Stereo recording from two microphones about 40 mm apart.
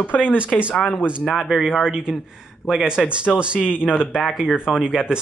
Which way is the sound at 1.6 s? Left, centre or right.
Centre.